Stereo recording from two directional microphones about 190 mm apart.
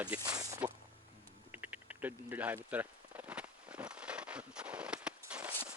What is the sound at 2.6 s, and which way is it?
Walk, 10° right (ahead or behind).